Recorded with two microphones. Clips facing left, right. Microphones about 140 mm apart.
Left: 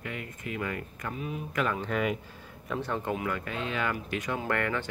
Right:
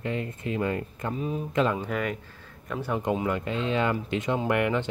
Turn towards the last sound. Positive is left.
turn(degrees=-20)  # may be behind; listen again after turning